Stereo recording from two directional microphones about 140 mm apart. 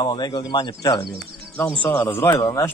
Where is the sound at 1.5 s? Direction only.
10° left (ahead or behind).